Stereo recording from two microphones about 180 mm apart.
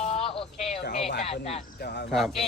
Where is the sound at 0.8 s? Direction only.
70° left (ahead or behind).